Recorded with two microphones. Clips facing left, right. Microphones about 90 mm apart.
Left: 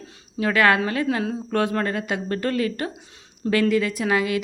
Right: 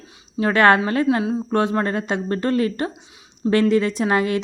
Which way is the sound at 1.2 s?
25° right (ahead or behind).